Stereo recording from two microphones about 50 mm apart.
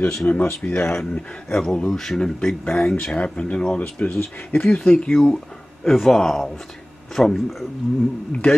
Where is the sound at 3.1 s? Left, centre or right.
Left.